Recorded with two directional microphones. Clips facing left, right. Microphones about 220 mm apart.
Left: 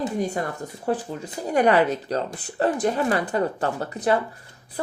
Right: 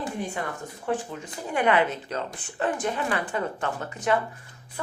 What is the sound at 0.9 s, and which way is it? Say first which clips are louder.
Speech: left 3 dB; 35° left (ahead or behind).